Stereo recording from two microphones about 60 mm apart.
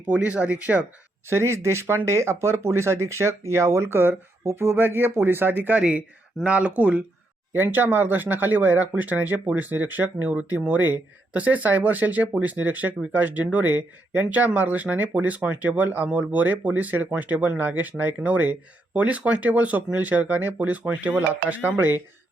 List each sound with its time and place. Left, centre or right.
0.2 s speech: right
1.3 s speech: right
6.4 s speech: right
7.5 s speech: right